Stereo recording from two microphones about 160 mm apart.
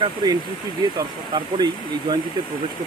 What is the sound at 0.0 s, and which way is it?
Speech, 25° right (ahead or behind).